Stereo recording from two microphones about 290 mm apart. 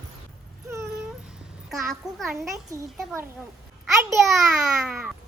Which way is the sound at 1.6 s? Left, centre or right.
Centre.